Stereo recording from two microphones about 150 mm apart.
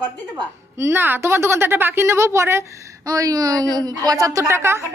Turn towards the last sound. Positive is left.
turn(degrees=-20)  # may be behind; listen again after turning